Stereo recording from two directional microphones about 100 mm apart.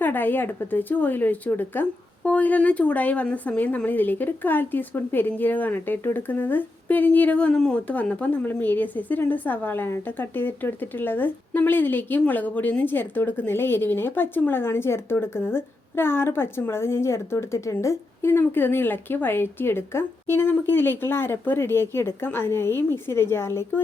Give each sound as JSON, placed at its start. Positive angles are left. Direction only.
{"t": 0.0, "sound": "speech", "side_deg": 20}